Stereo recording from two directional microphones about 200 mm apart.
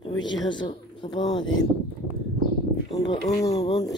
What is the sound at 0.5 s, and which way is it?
Speech, 25° left (ahead or behind).